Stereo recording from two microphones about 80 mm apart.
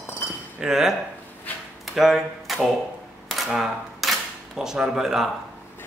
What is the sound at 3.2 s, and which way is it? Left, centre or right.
Camera, centre.